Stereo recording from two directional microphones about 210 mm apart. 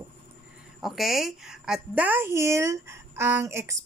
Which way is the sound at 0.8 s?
Centre (ahead or behind).